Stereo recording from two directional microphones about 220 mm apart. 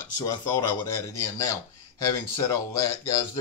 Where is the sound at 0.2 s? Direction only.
15° left (ahead or behind).